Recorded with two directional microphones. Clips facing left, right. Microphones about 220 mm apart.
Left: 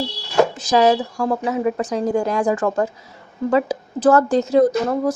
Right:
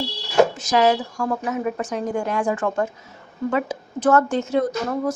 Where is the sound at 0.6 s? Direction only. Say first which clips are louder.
Left 3 dB; 35° left (ahead or behind).